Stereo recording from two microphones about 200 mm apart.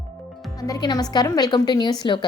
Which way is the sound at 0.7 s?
20° left (ahead or behind).